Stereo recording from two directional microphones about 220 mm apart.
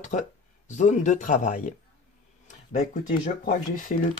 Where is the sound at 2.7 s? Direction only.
40° left (ahead or behind).